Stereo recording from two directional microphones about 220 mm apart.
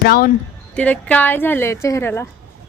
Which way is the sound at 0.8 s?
5° left (ahead or behind).